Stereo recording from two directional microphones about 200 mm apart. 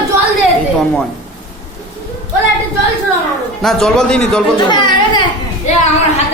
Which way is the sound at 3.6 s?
Centre (ahead or behind).